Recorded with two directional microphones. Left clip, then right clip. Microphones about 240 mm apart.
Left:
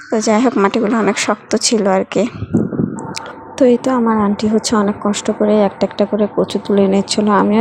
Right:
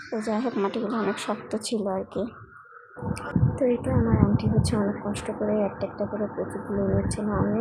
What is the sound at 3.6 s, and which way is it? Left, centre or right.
A woman's voice, left.